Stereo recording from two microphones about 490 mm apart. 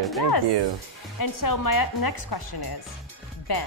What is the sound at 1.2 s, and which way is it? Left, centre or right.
Speech, left.